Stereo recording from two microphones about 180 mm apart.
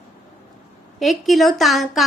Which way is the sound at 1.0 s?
Centre (ahead or behind).